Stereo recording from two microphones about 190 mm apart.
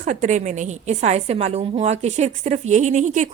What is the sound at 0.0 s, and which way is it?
A woman's voice, 40° right (ahead or behind).